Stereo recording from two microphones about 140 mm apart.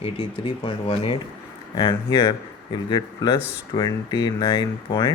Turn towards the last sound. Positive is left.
turn(degrees=30)  # may be behind; listen again after turning